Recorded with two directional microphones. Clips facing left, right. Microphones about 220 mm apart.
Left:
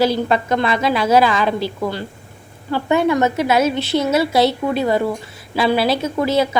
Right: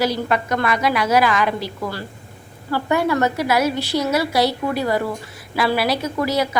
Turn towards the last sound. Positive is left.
turn(degrees=25)  # may be behind; listen again after turning